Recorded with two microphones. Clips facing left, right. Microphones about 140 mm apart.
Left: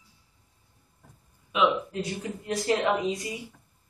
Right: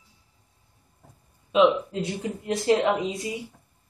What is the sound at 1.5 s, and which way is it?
Speech, 25° right (ahead or behind).